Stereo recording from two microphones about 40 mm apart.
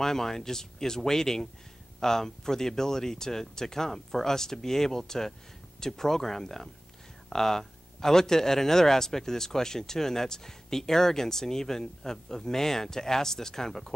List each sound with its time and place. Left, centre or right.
0.0 s speech: centre